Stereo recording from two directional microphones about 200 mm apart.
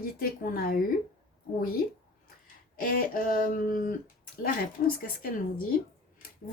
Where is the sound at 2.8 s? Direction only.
45° left (ahead or behind).